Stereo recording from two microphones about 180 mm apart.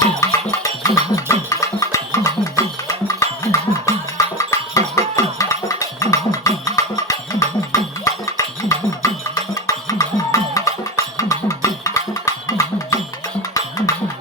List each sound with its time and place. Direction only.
0.2 s music: 20° left (ahead or behind)